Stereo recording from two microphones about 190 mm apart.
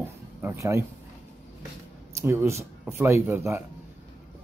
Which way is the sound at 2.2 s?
15° right (ahead or behind).